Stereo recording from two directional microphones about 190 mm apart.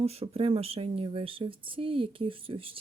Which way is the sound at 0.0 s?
30° right (ahead or behind).